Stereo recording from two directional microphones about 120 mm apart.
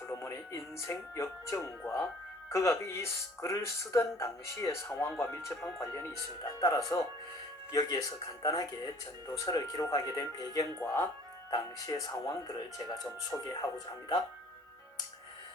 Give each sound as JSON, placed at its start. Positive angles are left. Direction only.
{"t": 0.1, "sound": "speech", "side_deg": 25}
{"t": 11.5, "sound": "speech", "side_deg": 30}